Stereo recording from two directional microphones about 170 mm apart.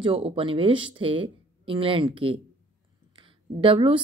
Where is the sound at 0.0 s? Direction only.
30° right (ahead or behind).